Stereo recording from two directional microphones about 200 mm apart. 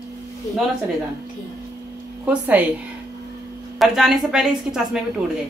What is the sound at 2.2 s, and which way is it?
Speech, 10° right (ahead or behind).